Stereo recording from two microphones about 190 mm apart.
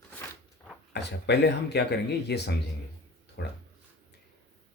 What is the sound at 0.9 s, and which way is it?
Speech, 60° left (ahead or behind).